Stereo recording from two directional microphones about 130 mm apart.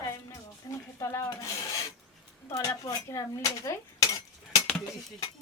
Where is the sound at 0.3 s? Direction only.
25° left (ahead or behind).